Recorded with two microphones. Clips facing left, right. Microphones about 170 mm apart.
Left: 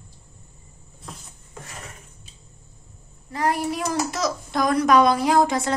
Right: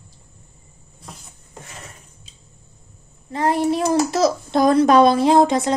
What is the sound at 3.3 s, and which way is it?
A child's voice, 25° right (ahead or behind).